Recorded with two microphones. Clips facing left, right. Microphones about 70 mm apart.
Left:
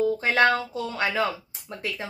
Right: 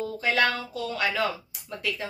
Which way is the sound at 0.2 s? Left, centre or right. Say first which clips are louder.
Left 4 dB; left.